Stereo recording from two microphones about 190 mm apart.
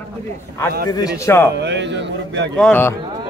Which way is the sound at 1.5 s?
65° right (ahead or behind).